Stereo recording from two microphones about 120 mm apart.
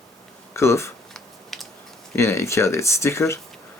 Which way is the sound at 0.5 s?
20° left (ahead or behind).